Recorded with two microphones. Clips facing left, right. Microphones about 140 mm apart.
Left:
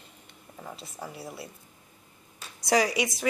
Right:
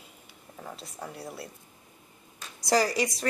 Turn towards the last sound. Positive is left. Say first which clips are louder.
# even
turn(degrees=0)  # may be behind; listen again after turning